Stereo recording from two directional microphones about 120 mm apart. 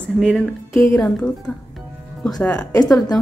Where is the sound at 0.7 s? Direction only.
25° left (ahead or behind).